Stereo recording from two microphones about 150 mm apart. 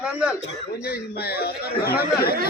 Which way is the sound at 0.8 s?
90° left.